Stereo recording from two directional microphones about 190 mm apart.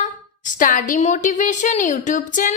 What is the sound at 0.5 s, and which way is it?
A woman's voice, 45° left (ahead or behind).